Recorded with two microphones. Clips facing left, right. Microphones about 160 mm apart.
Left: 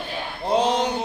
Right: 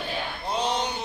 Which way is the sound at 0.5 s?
90° left.